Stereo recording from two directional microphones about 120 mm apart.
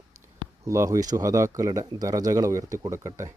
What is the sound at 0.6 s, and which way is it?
Speech, 25° right (ahead or behind).